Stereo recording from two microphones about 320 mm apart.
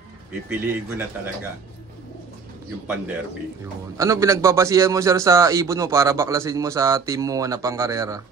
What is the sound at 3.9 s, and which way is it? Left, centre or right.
A man's voice, centre.